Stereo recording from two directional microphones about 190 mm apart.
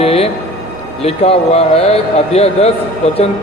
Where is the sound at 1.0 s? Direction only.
30° left (ahead or behind).